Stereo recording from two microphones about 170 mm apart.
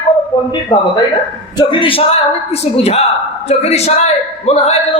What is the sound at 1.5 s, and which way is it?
Speech, 30° left (ahead or behind).